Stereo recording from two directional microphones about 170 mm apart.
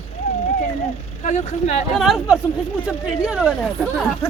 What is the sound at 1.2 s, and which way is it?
Speech, 40° left (ahead or behind).